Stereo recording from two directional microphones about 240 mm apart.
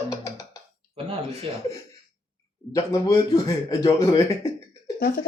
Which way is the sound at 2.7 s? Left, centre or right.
Centre.